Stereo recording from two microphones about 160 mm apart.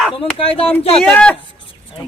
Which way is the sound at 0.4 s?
35° left (ahead or behind).